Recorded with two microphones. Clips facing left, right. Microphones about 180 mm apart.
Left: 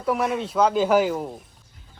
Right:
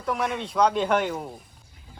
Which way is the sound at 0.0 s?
5° left (ahead or behind).